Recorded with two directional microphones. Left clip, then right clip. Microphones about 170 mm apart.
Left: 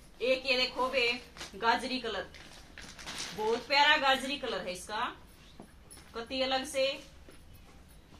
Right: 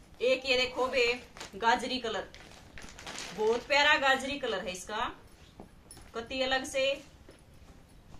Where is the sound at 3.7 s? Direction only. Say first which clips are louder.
Even; 10° right (ahead or behind).